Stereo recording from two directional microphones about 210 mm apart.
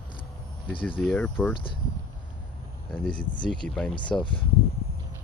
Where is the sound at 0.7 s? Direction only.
25° left (ahead or behind).